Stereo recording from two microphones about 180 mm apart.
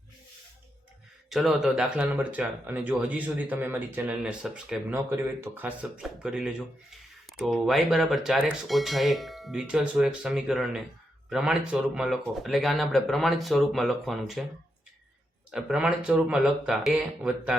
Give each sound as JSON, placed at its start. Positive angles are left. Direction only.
{"t": 1.3, "sound": "speech", "side_deg": 0}
{"t": 15.5, "sound": "speech", "side_deg": -5}